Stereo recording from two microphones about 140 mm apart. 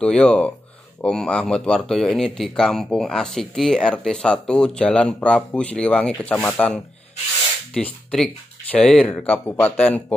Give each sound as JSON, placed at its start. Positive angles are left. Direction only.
{"t": 0.0, "sound": "speech", "side_deg": 5}